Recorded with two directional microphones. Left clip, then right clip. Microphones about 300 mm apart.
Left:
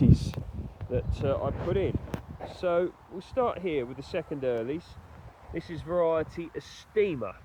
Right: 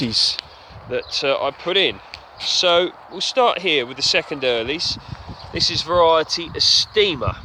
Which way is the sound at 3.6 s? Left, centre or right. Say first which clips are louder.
Right 14 dB; right.